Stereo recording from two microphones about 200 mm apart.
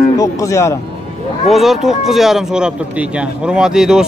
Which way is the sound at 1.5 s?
Centre (ahead or behind).